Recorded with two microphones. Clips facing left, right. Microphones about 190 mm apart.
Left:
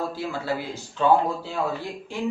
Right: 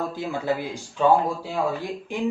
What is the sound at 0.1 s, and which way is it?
Speech, 15° right (ahead or behind).